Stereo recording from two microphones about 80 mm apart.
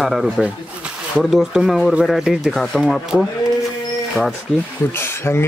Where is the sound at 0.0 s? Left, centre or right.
Centre.